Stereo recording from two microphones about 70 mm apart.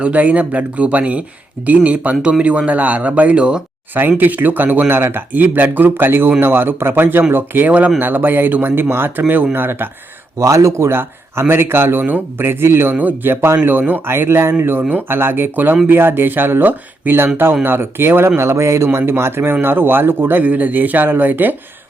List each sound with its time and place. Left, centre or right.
0.0 s a man's voice: right
10.3 s a man's voice: right